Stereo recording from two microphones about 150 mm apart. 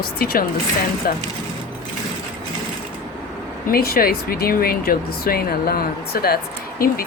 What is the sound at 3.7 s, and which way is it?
Speech, 85° left.